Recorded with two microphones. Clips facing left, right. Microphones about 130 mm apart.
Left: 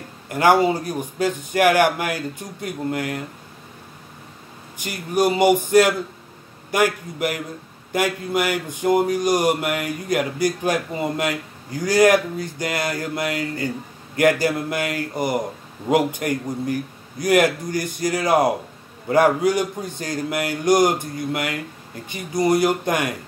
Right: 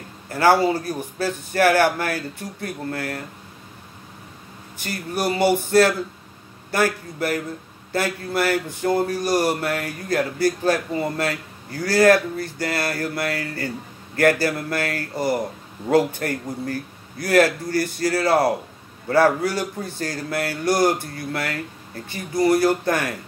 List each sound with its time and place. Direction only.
0.3 s speech: 15° left (ahead or behind)
4.7 s speech: 15° left (ahead or behind)